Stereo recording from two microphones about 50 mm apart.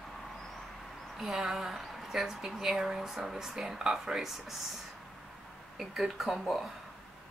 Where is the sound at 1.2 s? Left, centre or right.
Centre.